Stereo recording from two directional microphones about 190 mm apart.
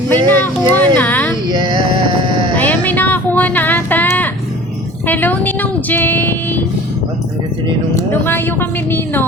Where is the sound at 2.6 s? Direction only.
10° left (ahead or behind).